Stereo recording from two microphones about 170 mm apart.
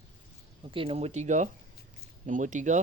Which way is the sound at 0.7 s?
35° right (ahead or behind).